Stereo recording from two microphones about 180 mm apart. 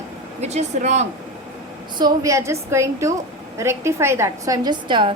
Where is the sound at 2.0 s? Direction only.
20° right (ahead or behind).